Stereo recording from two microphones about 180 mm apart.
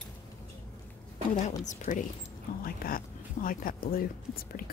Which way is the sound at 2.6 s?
55° left (ahead or behind).